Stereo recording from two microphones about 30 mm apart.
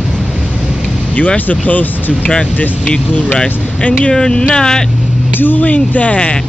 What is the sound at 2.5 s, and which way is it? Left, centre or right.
Speech, left.